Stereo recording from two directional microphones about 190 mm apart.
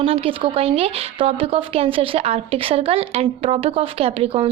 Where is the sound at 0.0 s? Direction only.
30° right (ahead or behind).